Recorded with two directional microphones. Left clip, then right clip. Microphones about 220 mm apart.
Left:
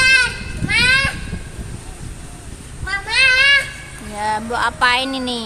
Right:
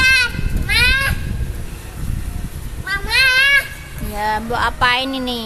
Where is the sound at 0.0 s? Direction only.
50° right (ahead or behind).